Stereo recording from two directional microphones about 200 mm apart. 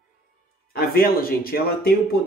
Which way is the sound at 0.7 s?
50° left (ahead or behind).